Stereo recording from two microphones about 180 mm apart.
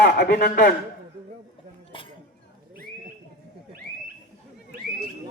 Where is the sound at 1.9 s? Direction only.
25° left (ahead or behind).